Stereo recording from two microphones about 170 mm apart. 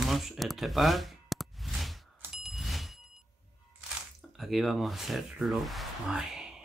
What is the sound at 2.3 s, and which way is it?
Bicycle bell, centre (ahead or behind).